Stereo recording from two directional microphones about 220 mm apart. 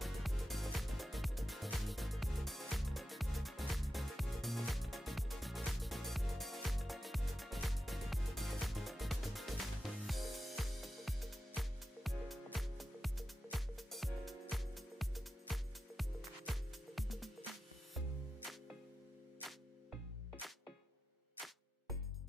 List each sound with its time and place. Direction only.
0.0 s music: centre (ahead or behind)
19.5 s music: centre (ahead or behind)